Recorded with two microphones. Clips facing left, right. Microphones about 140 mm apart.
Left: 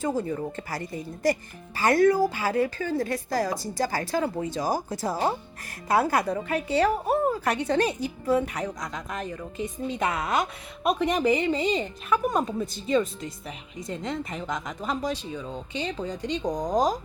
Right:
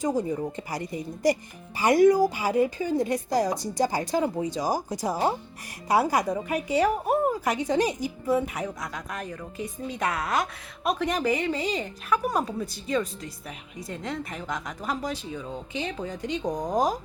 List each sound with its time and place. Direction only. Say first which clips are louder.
0.0 s a woman's voice: right 1 dB; 15° right (ahead or behind)